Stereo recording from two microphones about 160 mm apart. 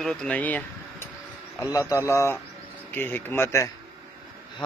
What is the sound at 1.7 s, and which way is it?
Speech, 20° left (ahead or behind).